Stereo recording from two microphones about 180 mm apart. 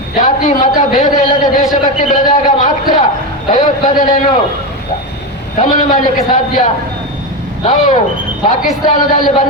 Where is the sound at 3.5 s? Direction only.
45° left (ahead or behind).